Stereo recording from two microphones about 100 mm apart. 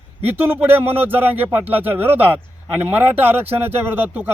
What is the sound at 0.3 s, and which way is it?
Speech, 20° right (ahead or behind).